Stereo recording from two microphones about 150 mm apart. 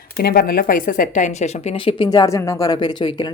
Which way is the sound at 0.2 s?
90° left.